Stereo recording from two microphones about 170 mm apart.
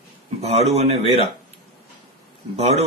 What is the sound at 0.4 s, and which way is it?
Speech, 40° right (ahead or behind).